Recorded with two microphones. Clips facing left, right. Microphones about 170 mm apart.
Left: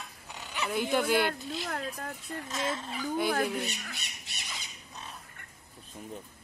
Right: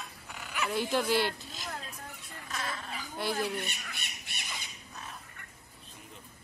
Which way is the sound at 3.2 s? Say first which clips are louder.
Left 1 dB; 55° left (ahead or behind).